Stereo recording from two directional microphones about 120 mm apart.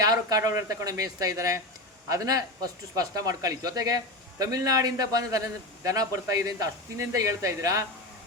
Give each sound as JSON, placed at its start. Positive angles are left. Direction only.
{"t": 0.0, "sound": "a man's voice", "side_deg": -30}